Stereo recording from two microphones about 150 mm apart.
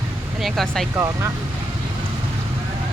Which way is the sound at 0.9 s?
20° right (ahead or behind).